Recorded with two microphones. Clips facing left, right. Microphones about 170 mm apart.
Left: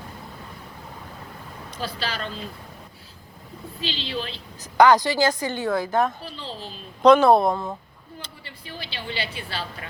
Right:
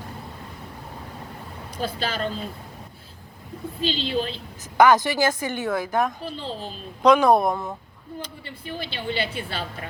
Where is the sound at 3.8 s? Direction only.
45° right (ahead or behind).